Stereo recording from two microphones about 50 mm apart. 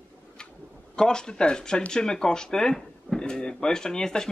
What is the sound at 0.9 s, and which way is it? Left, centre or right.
Speech, centre.